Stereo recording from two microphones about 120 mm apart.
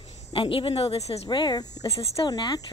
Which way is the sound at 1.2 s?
40° left (ahead or behind).